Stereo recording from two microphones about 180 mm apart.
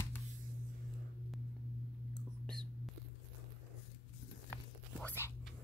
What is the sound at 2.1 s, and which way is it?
Whispering, 5° left (ahead or behind).